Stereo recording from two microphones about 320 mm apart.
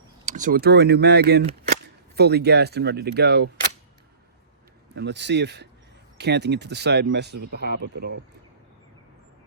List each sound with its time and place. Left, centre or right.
0.3 s speech: right
4.9 s speech: right